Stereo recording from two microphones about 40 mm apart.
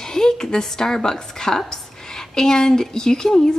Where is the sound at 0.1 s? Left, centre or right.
Centre.